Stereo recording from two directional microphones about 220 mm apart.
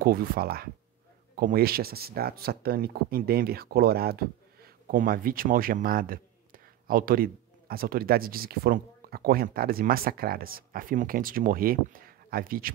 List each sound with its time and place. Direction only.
0.0 s speech: 40° right (ahead or behind)